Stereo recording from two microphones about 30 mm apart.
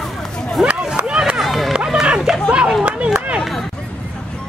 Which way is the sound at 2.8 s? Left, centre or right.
Right.